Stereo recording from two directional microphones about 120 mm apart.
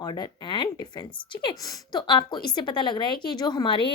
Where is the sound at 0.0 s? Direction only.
35° left (ahead or behind).